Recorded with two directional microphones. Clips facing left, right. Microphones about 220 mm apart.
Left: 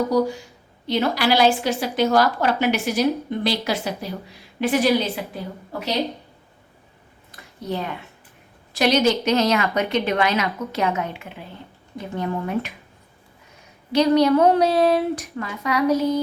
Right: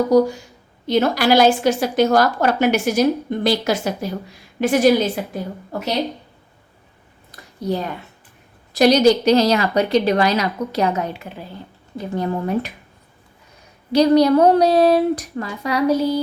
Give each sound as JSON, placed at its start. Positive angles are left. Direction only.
{"t": 0.1, "sound": "a woman's voice", "side_deg": -45}
{"t": 7.3, "sound": "a sound", "side_deg": -35}
{"t": 8.7, "sound": "a woman's voice", "side_deg": -40}
{"t": 13.9, "sound": "a woman's voice", "side_deg": -35}